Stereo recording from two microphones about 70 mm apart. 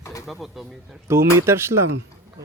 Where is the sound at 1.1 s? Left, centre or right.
Right.